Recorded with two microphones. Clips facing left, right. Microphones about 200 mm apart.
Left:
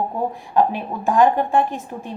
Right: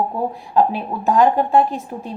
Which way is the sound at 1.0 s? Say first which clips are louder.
Right 1 dB; 50° left (ahead or behind).